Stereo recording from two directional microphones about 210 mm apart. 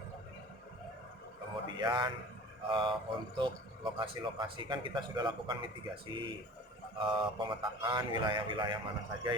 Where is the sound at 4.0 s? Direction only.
20° right (ahead or behind).